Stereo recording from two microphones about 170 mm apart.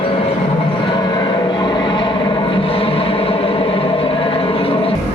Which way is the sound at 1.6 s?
25° left (ahead or behind).